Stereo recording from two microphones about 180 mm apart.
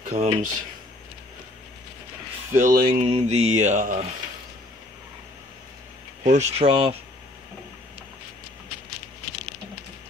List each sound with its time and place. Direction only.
0.1 s mantra: 40° right (ahead or behind)
2.6 s speech: 50° right (ahead or behind)
3.1 s mantra: 35° right (ahead or behind)
6.2 s mantra: 35° right (ahead or behind)